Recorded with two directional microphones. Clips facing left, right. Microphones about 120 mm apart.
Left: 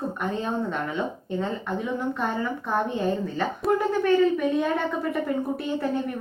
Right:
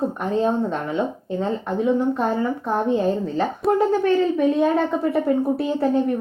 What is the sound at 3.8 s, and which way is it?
Speech, 30° right (ahead or behind).